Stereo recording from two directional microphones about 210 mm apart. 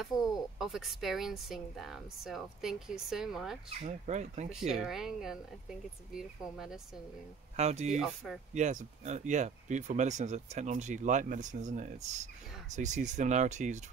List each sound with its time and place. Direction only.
0.0 s speech: centre (ahead or behind)
3.8 s speech: 30° right (ahead or behind)
4.5 s speech: centre (ahead or behind)
7.5 s speech: 30° right (ahead or behind)
7.9 s speech: centre (ahead or behind)
8.5 s speech: 35° right (ahead or behind)